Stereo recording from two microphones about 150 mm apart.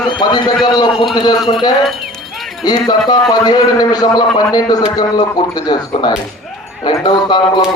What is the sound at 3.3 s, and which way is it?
A man's voice, 25° left (ahead or behind).